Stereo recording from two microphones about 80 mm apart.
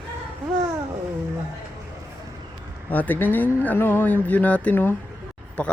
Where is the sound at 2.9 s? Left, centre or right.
Left.